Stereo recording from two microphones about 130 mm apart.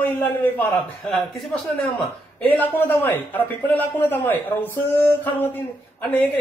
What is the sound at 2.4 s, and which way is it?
A man's voice, 15° left (ahead or behind).